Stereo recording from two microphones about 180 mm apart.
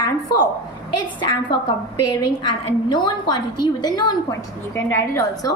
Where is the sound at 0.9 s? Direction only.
25° left (ahead or behind).